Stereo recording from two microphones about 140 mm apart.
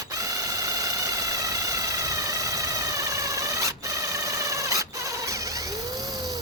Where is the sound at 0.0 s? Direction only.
25° right (ahead or behind).